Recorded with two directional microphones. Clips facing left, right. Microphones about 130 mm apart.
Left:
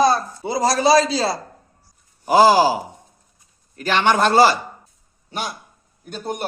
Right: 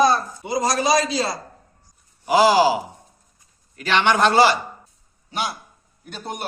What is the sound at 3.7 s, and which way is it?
A man's voice, 40° left (ahead or behind).